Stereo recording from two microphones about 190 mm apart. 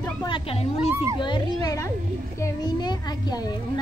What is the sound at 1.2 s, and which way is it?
Speech, 25° left (ahead or behind).